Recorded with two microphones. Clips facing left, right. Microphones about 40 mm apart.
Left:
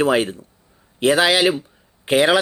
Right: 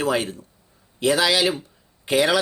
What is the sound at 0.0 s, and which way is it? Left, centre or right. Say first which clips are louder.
Speech: left 5 dB; left.